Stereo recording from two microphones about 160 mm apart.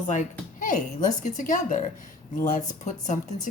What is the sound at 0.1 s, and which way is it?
A woman's voice, 50° left (ahead or behind).